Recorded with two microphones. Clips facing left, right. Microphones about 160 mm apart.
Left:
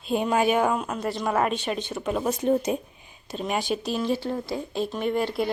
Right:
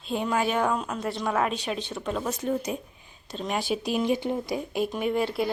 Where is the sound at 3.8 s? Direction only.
15° right (ahead or behind).